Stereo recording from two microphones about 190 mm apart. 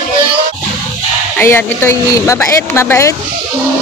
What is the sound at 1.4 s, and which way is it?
A woman's voice, 10° left (ahead or behind).